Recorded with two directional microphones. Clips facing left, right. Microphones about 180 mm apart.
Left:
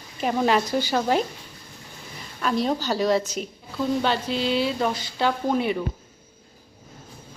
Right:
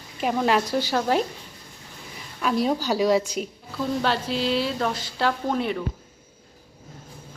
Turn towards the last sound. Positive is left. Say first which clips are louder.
# left 2 dB
turn(degrees=5)  # may be behind; listen again after turning